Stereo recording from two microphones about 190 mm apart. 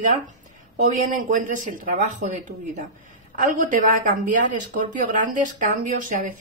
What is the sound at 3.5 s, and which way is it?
Speech, 45° right (ahead or behind).